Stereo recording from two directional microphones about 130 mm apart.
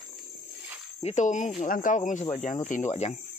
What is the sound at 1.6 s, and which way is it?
Speech, 90° left.